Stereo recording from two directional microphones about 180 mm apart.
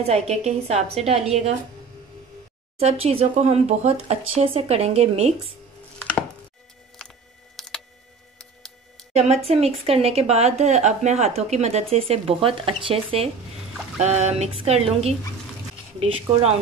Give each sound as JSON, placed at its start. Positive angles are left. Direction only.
{"t": 0.0, "sound": "speech", "side_deg": -35}
{"t": 2.8, "sound": "speech", "side_deg": -35}
{"t": 7.5, "sound": "camera", "side_deg": 5}
{"t": 9.1, "sound": "speech", "side_deg": -35}